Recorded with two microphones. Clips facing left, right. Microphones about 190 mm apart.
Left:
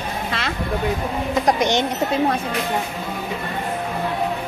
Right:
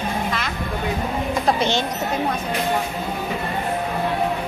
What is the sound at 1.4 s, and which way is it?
Speech, 15° left (ahead or behind).